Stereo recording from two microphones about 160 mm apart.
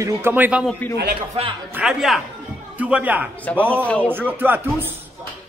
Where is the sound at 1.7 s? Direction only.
Centre (ahead or behind).